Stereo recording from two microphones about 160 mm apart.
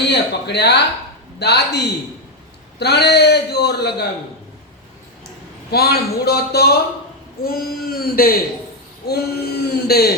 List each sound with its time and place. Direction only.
0.1 s a man's voice: 90° left
5.7 s speech: 80° left
7.4 s speech: 65° left (ahead or behind)
9.0 s speech: 80° left